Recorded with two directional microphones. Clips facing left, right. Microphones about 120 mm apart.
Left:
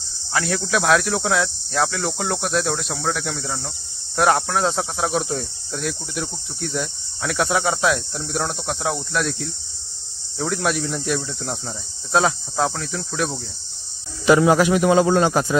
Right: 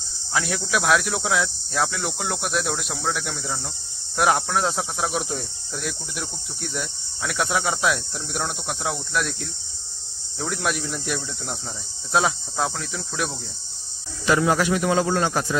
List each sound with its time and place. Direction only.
0.3 s speech: 5° right (ahead or behind)
14.2 s speech: 15° left (ahead or behind)